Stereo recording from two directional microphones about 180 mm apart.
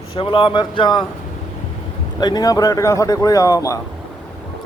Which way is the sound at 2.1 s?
20° left (ahead or behind).